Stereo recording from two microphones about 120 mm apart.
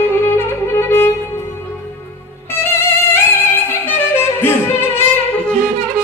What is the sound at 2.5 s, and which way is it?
Music, 20° left (ahead or behind).